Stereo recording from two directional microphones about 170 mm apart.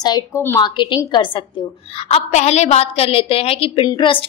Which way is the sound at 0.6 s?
30° left (ahead or behind).